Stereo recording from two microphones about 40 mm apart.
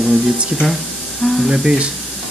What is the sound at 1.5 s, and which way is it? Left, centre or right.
Speech, right.